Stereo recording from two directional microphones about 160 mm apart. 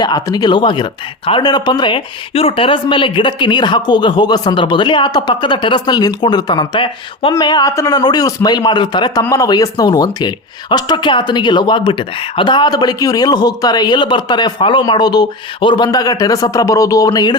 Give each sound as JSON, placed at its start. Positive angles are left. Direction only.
{"t": 0.0, "sound": "speech", "side_deg": 25}